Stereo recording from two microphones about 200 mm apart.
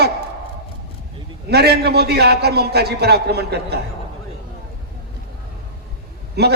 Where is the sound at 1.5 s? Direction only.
55° right (ahead or behind).